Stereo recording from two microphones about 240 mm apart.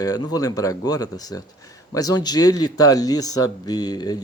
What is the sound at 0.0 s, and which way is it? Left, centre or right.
Speech, centre.